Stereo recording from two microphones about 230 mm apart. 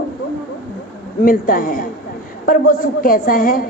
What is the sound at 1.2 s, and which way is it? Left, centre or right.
A woman's voice, left.